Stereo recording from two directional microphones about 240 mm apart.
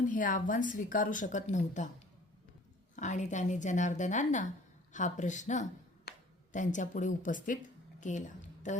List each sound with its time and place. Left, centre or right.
0.1 s a woman's voice: left
2.9 s a woman's voice: left